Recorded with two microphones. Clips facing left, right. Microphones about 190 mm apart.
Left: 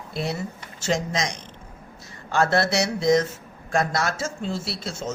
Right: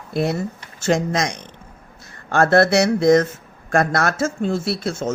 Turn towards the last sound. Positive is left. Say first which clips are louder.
# right 8 dB
turn(degrees=-55)  # may be behind; listen again after turning